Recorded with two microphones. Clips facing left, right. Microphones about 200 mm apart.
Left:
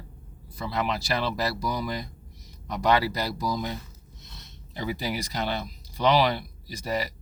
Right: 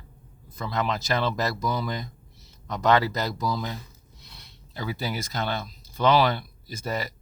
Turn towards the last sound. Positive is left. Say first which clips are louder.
# left 1 dB
turn(degrees=10)  # may be behind; listen again after turning